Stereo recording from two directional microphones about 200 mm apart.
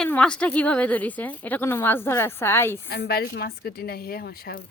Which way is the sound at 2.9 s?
50° left (ahead or behind).